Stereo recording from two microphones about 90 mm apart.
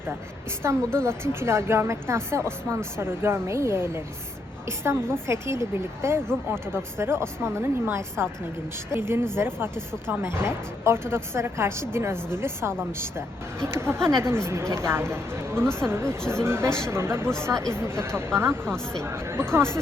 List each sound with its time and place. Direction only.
0.6 s a woman's voice: 30° right (ahead or behind)